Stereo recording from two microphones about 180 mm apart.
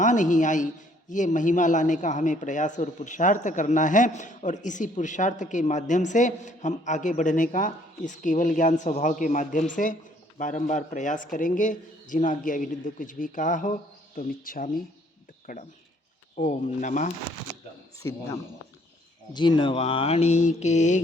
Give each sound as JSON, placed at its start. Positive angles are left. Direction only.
{"t": 0.0, "sound": "a man's voice", "side_deg": 45}
{"t": 18.0, "sound": "speech", "side_deg": 15}
{"t": 19.3, "sound": "speech", "side_deg": 25}